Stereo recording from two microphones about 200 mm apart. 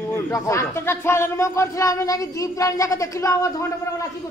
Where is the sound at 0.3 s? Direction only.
15° left (ahead or behind).